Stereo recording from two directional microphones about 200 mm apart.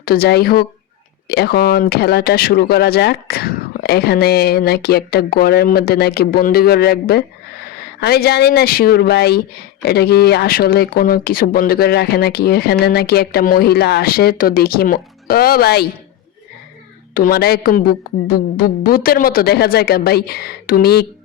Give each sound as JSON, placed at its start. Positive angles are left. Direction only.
{"t": 0.0, "sound": "speech", "side_deg": 50}
{"t": 17.2, "sound": "speech", "side_deg": 50}